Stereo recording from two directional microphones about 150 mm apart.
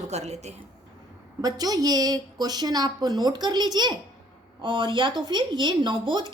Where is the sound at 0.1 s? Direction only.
45° right (ahead or behind).